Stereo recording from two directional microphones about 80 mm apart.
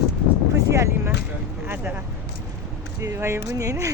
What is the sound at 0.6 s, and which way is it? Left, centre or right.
Speech, right.